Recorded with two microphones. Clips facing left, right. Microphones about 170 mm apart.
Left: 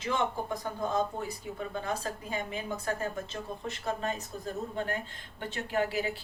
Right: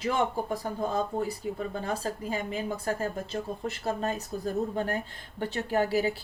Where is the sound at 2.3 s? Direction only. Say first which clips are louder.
Right 1 dB; 35° right (ahead or behind).